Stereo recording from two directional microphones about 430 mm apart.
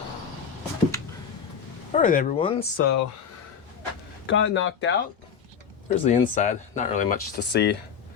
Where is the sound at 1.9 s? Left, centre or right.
Centre.